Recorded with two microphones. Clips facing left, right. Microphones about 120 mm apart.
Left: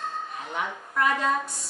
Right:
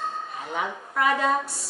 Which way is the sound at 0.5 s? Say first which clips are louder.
Right 1 dB; 5° right (ahead or behind).